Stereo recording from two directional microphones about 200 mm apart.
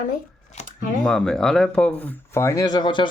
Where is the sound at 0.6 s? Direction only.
35° left (ahead or behind).